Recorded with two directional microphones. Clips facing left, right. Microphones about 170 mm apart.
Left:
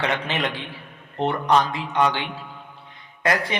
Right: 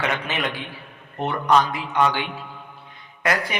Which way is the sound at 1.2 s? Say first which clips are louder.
Even; 25° left (ahead or behind).